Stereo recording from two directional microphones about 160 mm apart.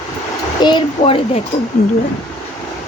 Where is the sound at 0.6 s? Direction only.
30° left (ahead or behind).